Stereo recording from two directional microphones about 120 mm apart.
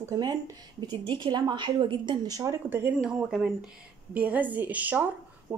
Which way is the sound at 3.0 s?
5° right (ahead or behind).